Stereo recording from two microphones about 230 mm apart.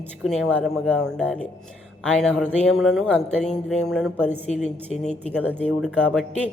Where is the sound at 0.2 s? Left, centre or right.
Centre.